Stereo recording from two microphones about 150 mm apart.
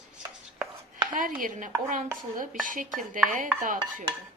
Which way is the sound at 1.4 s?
60° right (ahead or behind).